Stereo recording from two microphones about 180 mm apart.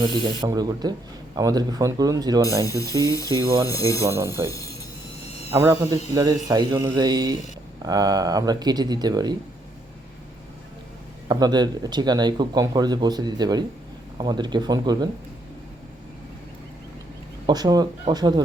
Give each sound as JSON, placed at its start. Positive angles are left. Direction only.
{"t": 0.0, "sound": "speech", "side_deg": -25}
{"t": 2.6, "sound": "speech", "side_deg": 20}
{"t": 3.3, "sound": "speech", "side_deg": -20}
{"t": 3.7, "sound": "speech", "side_deg": 15}
{"t": 4.0, "sound": "a man's voice", "side_deg": -15}
{"t": 4.4, "sound": "speech", "side_deg": 20}
{"t": 5.5, "sound": "a man's voice", "side_deg": -15}
{"t": 11.3, "sound": "speech", "side_deg": -25}
{"t": 17.4, "sound": "speech", "side_deg": -20}